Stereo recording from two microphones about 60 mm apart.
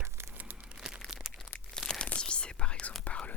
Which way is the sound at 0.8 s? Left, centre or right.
Centre.